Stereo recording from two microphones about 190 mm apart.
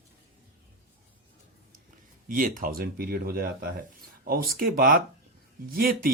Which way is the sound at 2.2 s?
45° right (ahead or behind).